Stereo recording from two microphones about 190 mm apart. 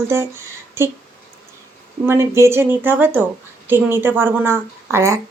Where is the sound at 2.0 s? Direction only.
15° right (ahead or behind).